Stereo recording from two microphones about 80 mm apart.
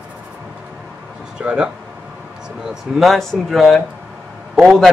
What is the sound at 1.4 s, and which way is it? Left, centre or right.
Speech, centre.